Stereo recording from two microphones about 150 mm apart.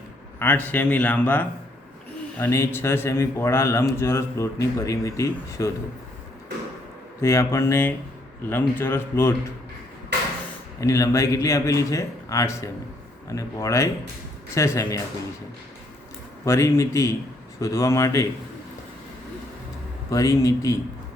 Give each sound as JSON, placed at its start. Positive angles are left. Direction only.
{"t": 0.3, "sound": "a man's voice", "side_deg": 10}
{"t": 7.2, "sound": "a man's voice", "side_deg": 20}
{"t": 10.8, "sound": "speech", "side_deg": 20}
{"t": 16.4, "sound": "speech", "side_deg": 20}
{"t": 20.1, "sound": "speech", "side_deg": 20}